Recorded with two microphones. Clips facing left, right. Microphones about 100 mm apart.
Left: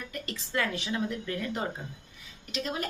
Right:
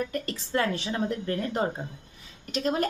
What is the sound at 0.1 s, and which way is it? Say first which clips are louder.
A woman's voice: right 5 dB; 35° right (ahead or behind).